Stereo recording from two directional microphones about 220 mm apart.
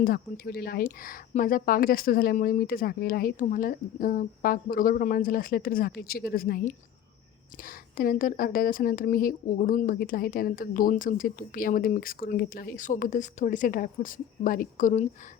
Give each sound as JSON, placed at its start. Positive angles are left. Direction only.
{"t": 0.0, "sound": "a woman's voice", "side_deg": 45}